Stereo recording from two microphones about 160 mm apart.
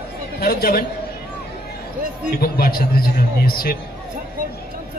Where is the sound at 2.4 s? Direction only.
70° left (ahead or behind).